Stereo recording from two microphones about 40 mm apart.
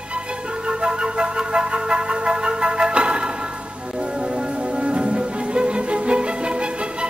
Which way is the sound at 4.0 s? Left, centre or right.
Right.